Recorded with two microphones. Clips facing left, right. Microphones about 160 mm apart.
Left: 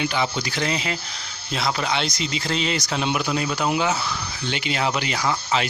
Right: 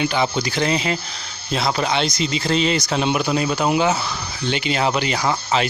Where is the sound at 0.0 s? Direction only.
35° right (ahead or behind).